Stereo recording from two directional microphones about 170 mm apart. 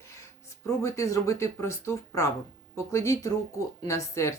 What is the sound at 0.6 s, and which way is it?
Speech, 20° left (ahead or behind).